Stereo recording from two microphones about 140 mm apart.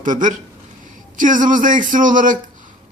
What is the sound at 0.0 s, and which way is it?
A man's voice, 65° right (ahead or behind).